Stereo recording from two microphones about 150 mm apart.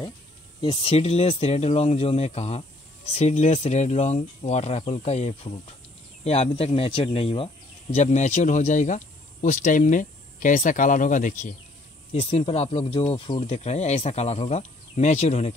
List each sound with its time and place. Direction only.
0.6 s speech: 40° left (ahead or behind); by 11.5 s 60° left (ahead or behind)
12.1 s speech: 45° left (ahead or behind)